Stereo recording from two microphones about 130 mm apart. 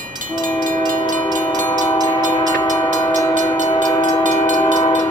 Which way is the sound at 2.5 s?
30° left (ahead or behind).